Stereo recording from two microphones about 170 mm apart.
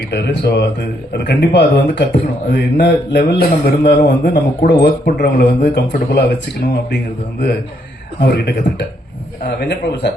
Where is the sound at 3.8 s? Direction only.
75° left (ahead or behind).